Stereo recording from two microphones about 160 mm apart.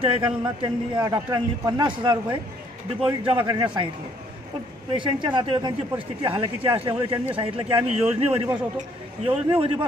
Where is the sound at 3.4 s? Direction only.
30° right (ahead or behind).